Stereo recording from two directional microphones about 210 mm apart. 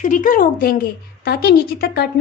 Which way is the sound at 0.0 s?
40° left (ahead or behind).